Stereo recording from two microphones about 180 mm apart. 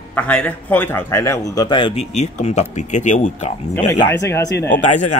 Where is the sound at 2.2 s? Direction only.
40° left (ahead or behind).